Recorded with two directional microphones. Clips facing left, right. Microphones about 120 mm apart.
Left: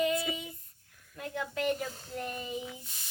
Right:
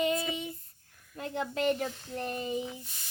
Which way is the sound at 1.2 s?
30° right (ahead or behind).